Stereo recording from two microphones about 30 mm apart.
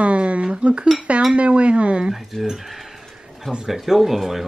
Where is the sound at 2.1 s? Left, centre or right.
Centre.